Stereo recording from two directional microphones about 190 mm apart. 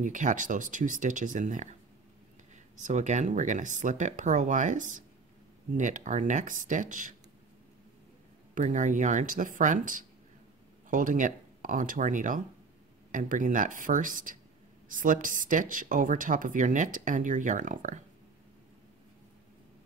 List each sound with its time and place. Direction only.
0.0 s speech: 40° right (ahead or behind)
8.5 s speech: 40° right (ahead or behind)